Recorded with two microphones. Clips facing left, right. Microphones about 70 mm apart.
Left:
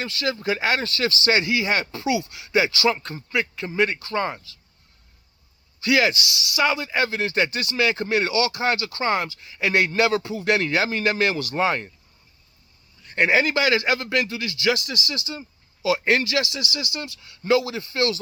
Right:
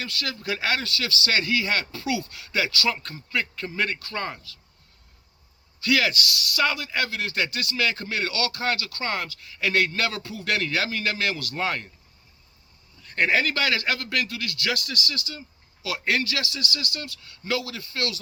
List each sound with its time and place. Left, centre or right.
0.0 s speech: left
5.8 s speech: left
13.1 s speech: centre